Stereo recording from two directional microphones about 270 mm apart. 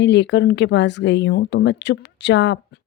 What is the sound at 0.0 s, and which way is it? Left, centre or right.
Speech, left.